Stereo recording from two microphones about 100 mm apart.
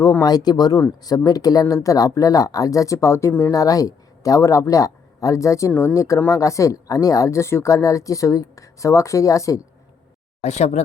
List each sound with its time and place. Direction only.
0.2 s a woman's voice: 40° left (ahead or behind); by 3.5 s 25° left (ahead or behind)
3.5 s a woman's voice: 35° left (ahead or behind)